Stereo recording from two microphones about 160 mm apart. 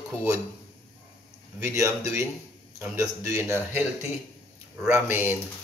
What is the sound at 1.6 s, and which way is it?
A man's voice, 20° right (ahead or behind).